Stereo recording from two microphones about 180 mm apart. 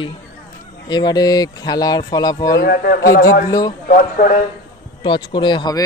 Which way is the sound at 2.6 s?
60° left (ahead or behind).